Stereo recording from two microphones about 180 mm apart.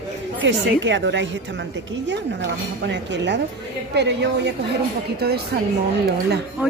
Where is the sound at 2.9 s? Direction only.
75° right (ahead or behind).